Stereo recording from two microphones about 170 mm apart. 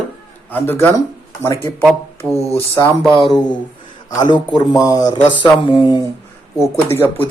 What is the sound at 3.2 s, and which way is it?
Speech, centre (ahead or behind).